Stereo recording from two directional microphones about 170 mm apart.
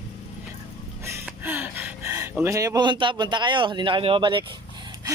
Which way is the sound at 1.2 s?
10° right (ahead or behind).